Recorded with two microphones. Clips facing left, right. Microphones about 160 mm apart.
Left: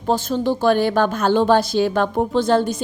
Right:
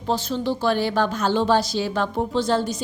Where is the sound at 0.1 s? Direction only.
50° left (ahead or behind).